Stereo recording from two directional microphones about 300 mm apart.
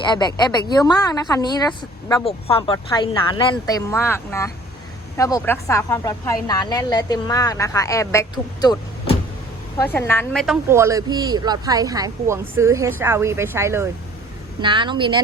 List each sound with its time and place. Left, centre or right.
0.1 s a woman's voice: centre